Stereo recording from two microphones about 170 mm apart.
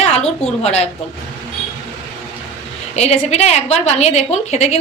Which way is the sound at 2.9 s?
40° left (ahead or behind).